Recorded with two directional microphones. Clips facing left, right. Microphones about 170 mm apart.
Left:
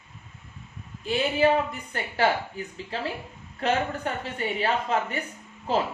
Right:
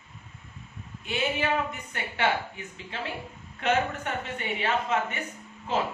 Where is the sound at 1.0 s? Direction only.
35° left (ahead or behind).